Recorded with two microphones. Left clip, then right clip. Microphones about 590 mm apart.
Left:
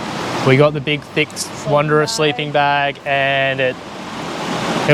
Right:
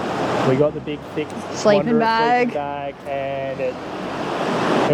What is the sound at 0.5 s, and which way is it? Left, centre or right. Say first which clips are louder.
Speech: left 6 dB; left.